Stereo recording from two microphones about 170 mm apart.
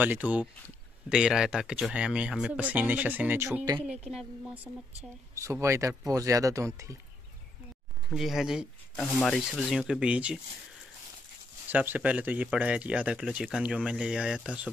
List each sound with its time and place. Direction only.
0.0 s speech: 10° right (ahead or behind)
3.8 s speech: 5° right (ahead or behind)
5.3 s speech: 15° right (ahead or behind)
8.1 s speech: centre (ahead or behind)
11.7 s speech: 10° right (ahead or behind)